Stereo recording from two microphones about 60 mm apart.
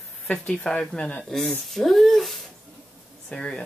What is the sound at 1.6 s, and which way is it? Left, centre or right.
Speech, centre.